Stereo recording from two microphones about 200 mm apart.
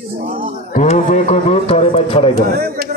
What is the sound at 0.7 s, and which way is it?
A man's voice, 40° left (ahead or behind).